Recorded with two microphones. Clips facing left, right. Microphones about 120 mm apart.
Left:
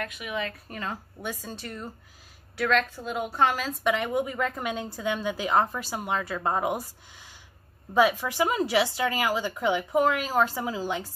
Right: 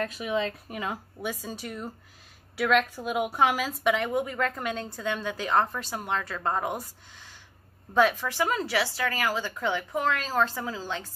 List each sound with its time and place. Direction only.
0.0 s a woman's voice: 30° right (ahead or behind)
0.7 s a woman's voice: 10° right (ahead or behind); by 6.8 s 10° left (ahead or behind)
7.9 s a woman's voice: 10° left (ahead or behind)